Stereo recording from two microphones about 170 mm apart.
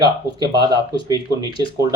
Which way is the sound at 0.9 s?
25° left (ahead or behind).